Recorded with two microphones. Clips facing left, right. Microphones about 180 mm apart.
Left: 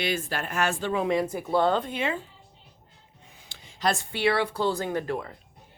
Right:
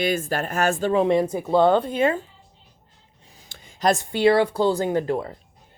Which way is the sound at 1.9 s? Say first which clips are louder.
Right 8 dB; 45° right (ahead or behind).